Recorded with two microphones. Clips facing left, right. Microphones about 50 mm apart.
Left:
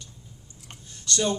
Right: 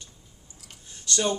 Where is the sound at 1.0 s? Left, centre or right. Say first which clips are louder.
Even; right.